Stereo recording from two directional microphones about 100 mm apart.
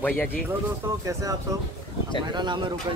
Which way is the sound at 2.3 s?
50° right (ahead or behind).